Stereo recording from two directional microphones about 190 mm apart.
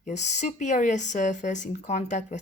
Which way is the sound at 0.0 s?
35° left (ahead or behind).